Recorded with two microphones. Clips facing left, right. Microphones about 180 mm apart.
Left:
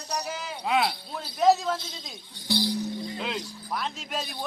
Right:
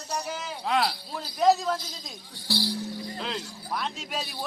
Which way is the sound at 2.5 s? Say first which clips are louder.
Left 3 dB; 20° left (ahead or behind).